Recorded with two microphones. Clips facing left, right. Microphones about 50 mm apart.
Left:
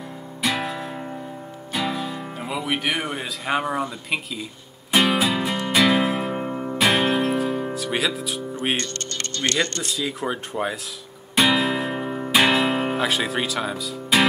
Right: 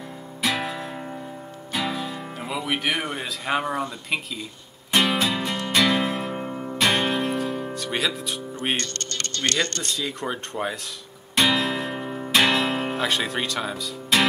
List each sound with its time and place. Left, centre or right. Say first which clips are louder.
0.4 s music: left 1 dB; centre
1.7 s speech: left 1 dB; centre
4.9 s music: left 2 dB; centre
8.7 s speech: left 1 dB; left
9.8 s speech: left 2 dB; centre
11.3 s music: left 2 dB; centre